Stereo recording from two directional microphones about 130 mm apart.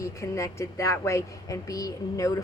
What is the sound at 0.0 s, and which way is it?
A woman's voice, 25° left (ahead or behind).